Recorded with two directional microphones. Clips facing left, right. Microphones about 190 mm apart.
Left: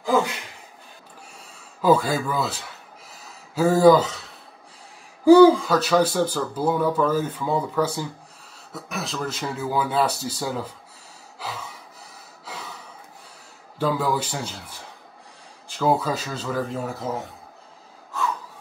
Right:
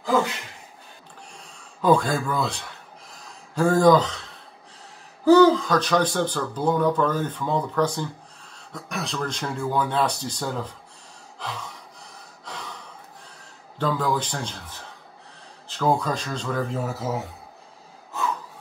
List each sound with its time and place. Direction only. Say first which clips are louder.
1.8 s speech: left 1 dB; 5° left (ahead or behind)
3.1 s a sound: even; 5° left (ahead or behind)
5.2 s speech: left 3 dB; 10° left (ahead or behind)
11.3 s gasp: even; 5° left (ahead or behind)
13.7 s speech: left 1 dB; 5° left (ahead or behind)